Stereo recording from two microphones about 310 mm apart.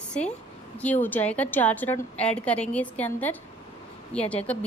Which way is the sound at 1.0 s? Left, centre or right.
Centre.